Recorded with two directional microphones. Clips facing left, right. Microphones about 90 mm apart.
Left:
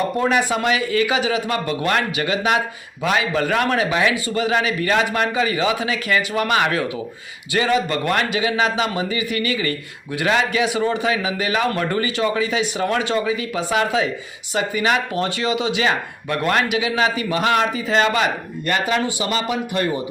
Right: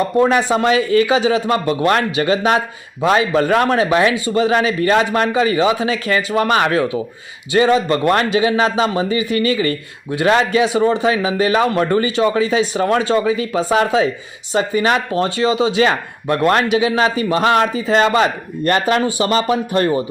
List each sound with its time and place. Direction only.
0.2 s a man's voice: 30° right (ahead or behind)
18.7 s speech: 45° right (ahead or behind)